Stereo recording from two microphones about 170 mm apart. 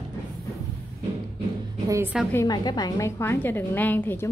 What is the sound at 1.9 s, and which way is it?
Speech, 15° right (ahead or behind).